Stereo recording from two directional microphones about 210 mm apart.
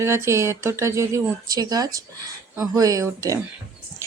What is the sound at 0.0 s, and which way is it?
Speech, 15° right (ahead or behind).